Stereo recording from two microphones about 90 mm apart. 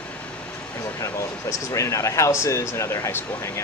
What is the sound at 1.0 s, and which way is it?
Speech, 35° left (ahead or behind).